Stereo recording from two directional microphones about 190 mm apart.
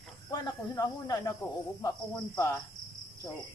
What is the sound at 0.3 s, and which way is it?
Speech, 20° left (ahead or behind).